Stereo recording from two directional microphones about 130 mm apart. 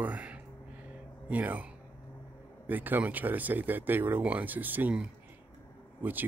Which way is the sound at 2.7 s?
15° right (ahead or behind).